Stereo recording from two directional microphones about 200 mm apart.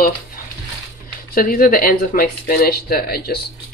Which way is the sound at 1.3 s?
45° left (ahead or behind).